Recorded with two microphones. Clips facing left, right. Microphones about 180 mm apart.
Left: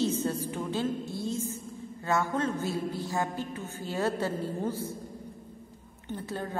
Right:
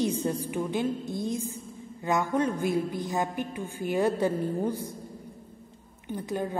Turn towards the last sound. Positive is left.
turn(degrees=-15)  # may be behind; listen again after turning